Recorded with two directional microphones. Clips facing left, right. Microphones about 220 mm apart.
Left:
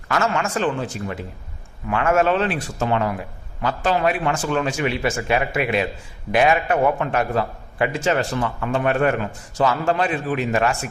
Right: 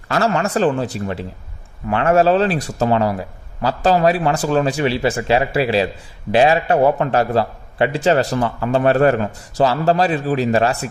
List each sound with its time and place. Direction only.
0.1 s a man's voice: 35° right (ahead or behind)